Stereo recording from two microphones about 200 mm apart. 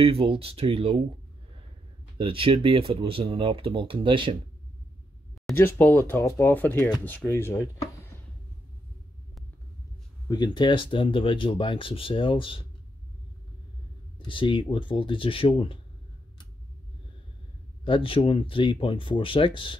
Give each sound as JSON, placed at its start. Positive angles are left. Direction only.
{"t": 0.0, "sound": "speech", "side_deg": -30}
{"t": 2.1, "sound": "speech", "side_deg": -25}
{"t": 5.6, "sound": "speech", "side_deg": 10}
{"t": 10.2, "sound": "speech", "side_deg": 20}
{"t": 14.1, "sound": "speech", "side_deg": 25}
{"t": 17.8, "sound": "speech", "side_deg": 25}